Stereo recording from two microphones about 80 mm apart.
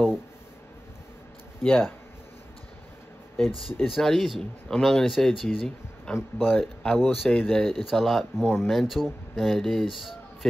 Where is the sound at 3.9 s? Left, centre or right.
Centre.